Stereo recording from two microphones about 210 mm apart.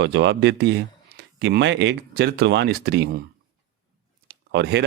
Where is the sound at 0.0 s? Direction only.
55° right (ahead or behind).